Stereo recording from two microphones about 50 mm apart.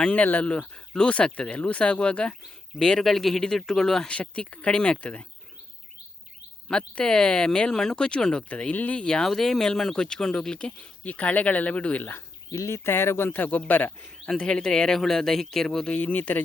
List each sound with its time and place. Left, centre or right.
0.0 s speech: left
4.1 s speech: left
6.7 s speech: centre
8.7 s speech: left
9.0 s speech: centre
9.2 s speech: centre
11.0 s speech: left
12.6 s speech: left
14.3 s speech: centre
15.9 s speech: left